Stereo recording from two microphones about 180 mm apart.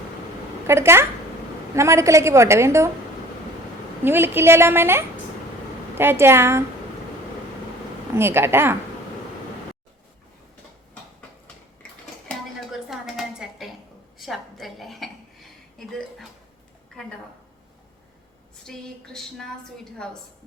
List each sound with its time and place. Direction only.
0.7 s a woman's voice: 15° right (ahead or behind)
4.0 s a woman's voice: 10° right (ahead or behind)
8.1 s a woman's voice: 15° right (ahead or behind)
12.3 s a sound: centre (ahead or behind)
18.6 s a woman's voice: 5° left (ahead or behind)